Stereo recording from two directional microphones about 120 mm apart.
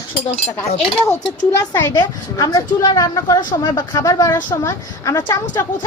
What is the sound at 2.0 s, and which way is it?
Speech, 30° left (ahead or behind).